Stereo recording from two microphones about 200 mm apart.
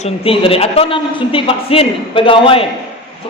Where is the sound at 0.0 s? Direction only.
30° left (ahead or behind).